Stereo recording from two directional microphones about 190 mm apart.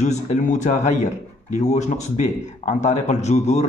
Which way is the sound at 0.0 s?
40° left (ahead or behind).